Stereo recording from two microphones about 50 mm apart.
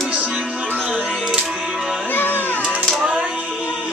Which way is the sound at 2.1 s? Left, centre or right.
Left.